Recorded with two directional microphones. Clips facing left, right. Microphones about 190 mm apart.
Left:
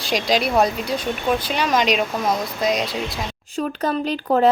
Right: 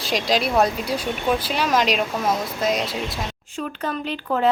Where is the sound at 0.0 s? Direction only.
Centre (ahead or behind).